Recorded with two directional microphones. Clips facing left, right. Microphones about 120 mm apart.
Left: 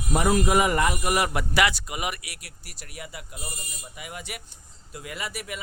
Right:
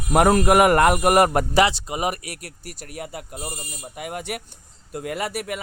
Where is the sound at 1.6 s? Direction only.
30° right (ahead or behind); by 5.6 s 60° right (ahead or behind).